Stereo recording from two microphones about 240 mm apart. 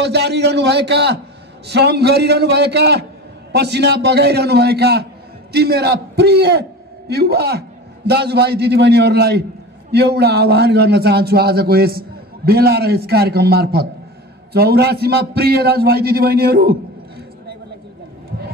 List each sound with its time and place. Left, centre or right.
0.0 s a man's voice: right